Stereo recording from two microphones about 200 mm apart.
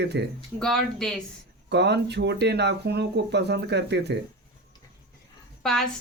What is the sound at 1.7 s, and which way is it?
Speech, 60° right (ahead or behind).